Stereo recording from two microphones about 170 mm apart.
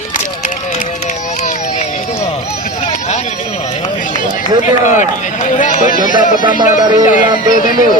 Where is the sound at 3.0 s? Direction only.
40° left (ahead or behind).